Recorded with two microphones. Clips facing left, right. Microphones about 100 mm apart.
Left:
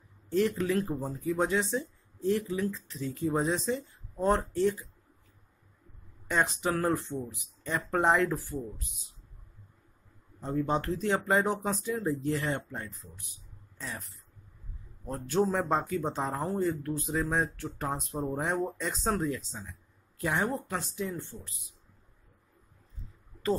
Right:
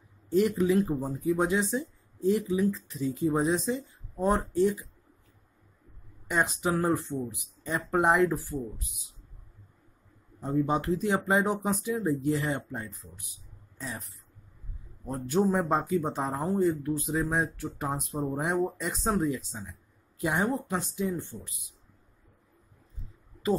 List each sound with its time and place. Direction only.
0.3 s speech: 15° right (ahead or behind)
6.2 s speech: 15° right (ahead or behind)
10.4 s speech: 15° right (ahead or behind)
15.0 s speech: 15° right (ahead or behind)